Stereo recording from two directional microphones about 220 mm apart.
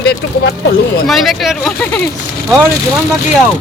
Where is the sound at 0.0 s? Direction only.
50° left (ahead or behind).